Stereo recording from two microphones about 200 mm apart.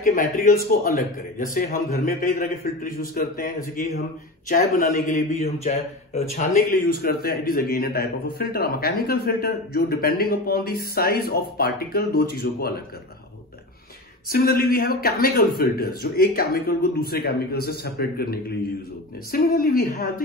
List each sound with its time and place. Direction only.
0.0 s a man's voice: 45° left (ahead or behind)
6.3 s a man's voice: 45° left (ahead or behind)
14.3 s a man's voice: 50° left (ahead or behind)